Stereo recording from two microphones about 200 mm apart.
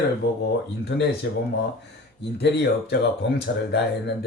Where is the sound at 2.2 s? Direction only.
55° left (ahead or behind).